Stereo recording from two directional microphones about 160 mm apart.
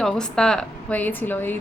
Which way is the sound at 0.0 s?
5° left (ahead or behind).